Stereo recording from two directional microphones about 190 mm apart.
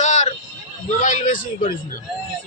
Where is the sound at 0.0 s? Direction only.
40° left (ahead or behind).